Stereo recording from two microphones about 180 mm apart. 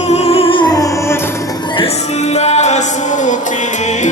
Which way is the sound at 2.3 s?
40° left (ahead or behind).